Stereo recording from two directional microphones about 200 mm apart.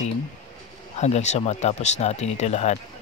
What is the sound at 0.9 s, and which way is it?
Speech, 35° left (ahead or behind).